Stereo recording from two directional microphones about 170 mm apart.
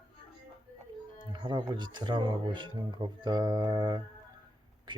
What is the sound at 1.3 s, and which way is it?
Speech, 25° right (ahead or behind).